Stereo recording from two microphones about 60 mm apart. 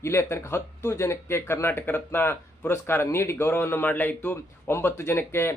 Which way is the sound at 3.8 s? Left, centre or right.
Left.